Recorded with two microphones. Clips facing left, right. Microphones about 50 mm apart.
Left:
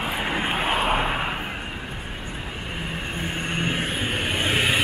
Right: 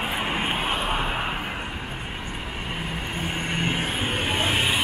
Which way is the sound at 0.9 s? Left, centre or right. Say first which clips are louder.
Left 3 dB; centre.